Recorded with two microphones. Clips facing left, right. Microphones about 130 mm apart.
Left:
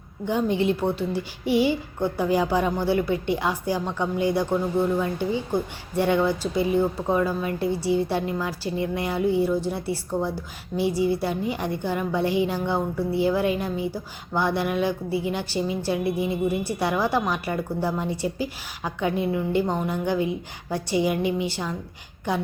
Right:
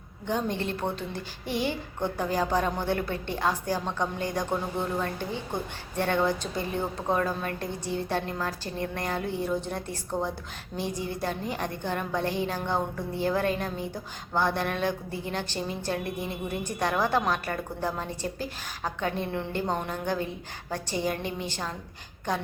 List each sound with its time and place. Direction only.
0.3 s a woman's voice: 10° left (ahead or behind)
10.1 s a woman's voice: 15° right (ahead or behind)
10.8 s a woman's voice: 10° left (ahead or behind)